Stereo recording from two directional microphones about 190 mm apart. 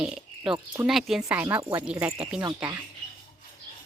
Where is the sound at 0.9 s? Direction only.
Centre (ahead or behind).